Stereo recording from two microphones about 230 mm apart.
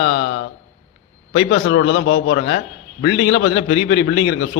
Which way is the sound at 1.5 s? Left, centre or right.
Left.